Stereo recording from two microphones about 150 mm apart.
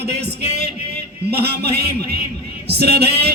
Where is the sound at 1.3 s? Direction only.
90° right.